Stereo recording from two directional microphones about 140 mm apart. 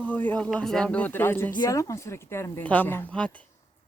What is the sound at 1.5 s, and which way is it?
A woman's voice, 25° left (ahead or behind).